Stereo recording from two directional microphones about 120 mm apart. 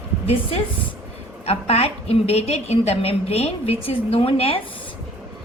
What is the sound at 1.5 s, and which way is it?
A woman's voice, 55° left (ahead or behind).